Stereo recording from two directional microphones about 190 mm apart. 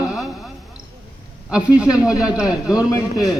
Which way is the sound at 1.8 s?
20° left (ahead or behind).